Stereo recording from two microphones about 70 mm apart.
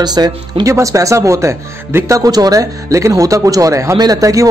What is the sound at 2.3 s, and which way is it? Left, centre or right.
Speech, right.